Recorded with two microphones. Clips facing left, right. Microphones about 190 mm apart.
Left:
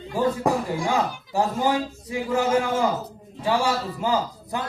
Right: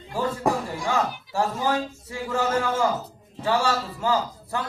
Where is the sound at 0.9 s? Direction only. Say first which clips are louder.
Left 1 dB; 15° left (ahead or behind).